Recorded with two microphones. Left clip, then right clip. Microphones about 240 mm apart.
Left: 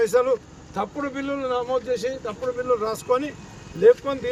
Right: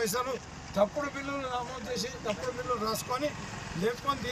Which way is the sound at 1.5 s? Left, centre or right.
Left.